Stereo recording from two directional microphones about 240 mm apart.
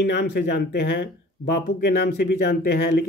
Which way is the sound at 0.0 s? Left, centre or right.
Left.